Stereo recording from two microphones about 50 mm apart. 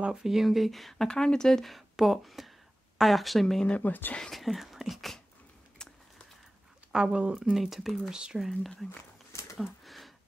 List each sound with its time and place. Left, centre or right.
0.0 s a woman's voice: centre
1.0 s a woman's voice: centre
3.8 s speech: left
4.2 s a woman's voice: centre
5.8 s a sound: centre
6.9 s speech: centre
7.5 s a woman's voice: centre
8.1 s speech: centre
9.3 s a sound: left
9.8 s a sound: centre